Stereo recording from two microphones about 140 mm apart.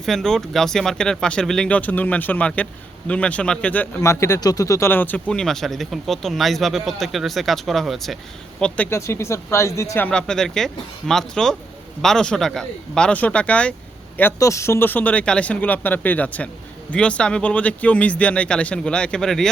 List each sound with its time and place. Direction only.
0.0 s speech: 5° left (ahead or behind); by 10.1 s 20° left (ahead or behind)
10.1 s speech: 5° left (ahead or behind)
14.2 s speech: 20° left (ahead or behind); by 19.5 s 5° left (ahead or behind)